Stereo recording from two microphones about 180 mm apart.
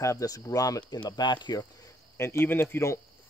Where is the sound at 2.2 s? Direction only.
15° left (ahead or behind).